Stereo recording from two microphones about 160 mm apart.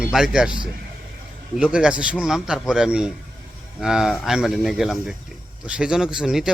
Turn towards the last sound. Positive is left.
turn(degrees=-5)  # may be behind; listen again after turning